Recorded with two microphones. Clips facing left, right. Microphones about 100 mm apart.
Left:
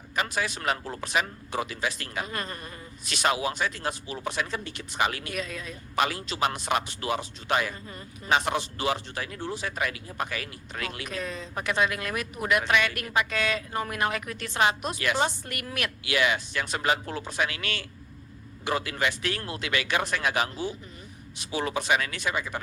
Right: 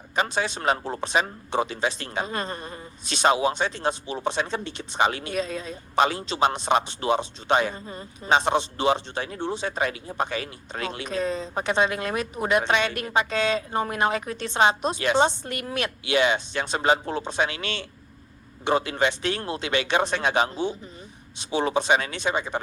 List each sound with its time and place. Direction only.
0.2 s a man's voice: 25° right (ahead or behind)